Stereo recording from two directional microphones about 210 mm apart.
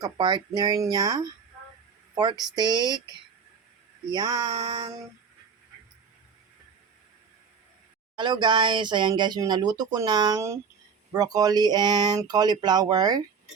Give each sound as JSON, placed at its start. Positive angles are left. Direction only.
{"t": 0.0, "sound": "speech", "side_deg": -20}
{"t": 2.6, "sound": "speech", "side_deg": -20}
{"t": 4.1, "sound": "speech", "side_deg": -20}
{"t": 8.1, "sound": "speech", "side_deg": -20}